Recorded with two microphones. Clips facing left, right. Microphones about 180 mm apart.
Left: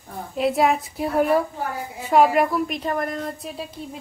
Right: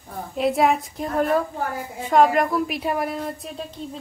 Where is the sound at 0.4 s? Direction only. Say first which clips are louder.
Even; centre (ahead or behind).